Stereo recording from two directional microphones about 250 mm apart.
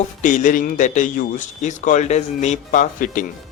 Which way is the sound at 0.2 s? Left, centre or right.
Left.